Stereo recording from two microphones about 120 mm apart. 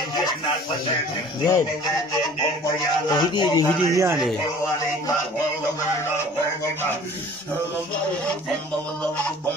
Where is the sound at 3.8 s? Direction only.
25° right (ahead or behind).